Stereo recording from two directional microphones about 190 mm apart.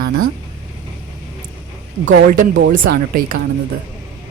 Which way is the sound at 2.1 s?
45° right (ahead or behind).